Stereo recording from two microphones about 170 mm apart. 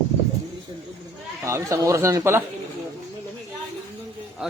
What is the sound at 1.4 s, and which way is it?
A man's voice, 20° right (ahead or behind).